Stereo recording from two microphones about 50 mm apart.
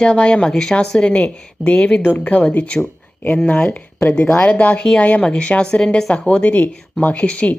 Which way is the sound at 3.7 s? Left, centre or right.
Left.